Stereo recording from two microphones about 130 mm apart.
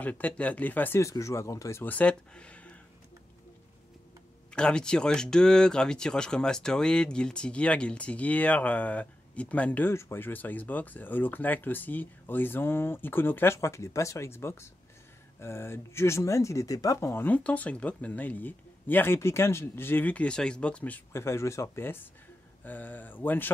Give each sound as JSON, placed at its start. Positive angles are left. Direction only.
{"t": 0.0, "sound": "speech", "side_deg": 10}
{"t": 4.6, "sound": "speech", "side_deg": 5}